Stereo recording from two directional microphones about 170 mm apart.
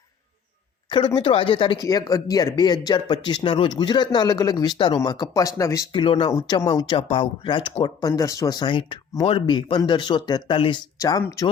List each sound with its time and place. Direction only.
0.9 s speech: 30° left (ahead or behind)